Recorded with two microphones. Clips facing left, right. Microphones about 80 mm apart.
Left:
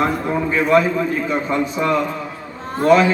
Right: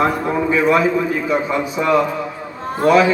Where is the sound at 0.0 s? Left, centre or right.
Centre.